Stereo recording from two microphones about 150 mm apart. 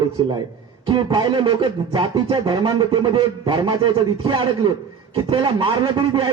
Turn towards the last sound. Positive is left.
turn(degrees=-30)  # may be behind; listen again after turning